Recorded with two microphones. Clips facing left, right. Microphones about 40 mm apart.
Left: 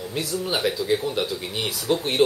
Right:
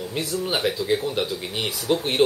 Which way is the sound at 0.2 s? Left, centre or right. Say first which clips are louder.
Even; centre.